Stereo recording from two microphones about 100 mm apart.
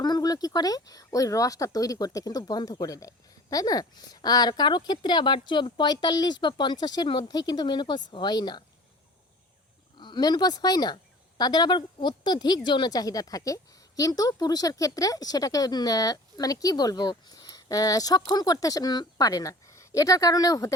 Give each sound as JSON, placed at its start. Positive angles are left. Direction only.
{"t": 0.0, "sound": "speech", "side_deg": 40}
{"t": 10.0, "sound": "a woman's voice", "side_deg": 45}